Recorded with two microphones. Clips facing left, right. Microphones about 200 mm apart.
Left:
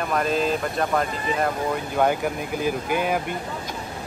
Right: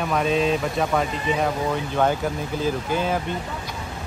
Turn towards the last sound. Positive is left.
turn(degrees=15)  # may be behind; listen again after turning